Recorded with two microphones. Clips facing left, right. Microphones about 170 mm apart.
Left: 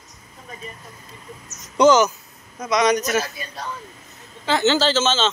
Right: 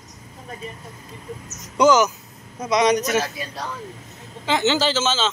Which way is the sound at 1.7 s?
10° right (ahead or behind).